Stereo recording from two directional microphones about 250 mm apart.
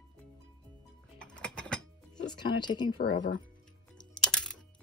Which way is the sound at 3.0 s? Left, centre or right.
Left.